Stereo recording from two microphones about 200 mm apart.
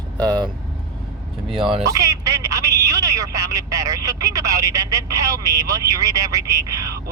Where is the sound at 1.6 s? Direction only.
20° right (ahead or behind).